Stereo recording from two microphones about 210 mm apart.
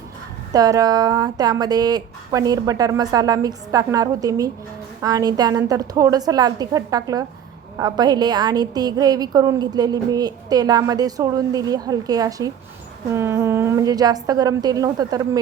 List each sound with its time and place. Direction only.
0.5 s a woman's voice: 15° right (ahead or behind)